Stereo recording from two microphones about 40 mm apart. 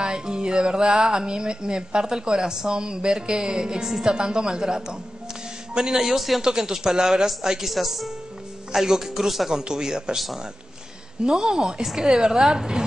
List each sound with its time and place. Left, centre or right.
0.0 s a woman's voice: centre
9.5 s a woman's voice: centre
10.1 s a woman's voice: centre